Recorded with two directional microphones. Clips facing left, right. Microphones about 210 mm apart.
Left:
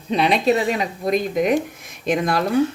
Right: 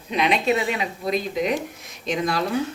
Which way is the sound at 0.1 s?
35° left (ahead or behind).